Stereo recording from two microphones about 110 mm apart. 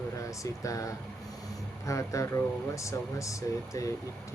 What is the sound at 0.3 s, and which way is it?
Speech, 30° left (ahead or behind).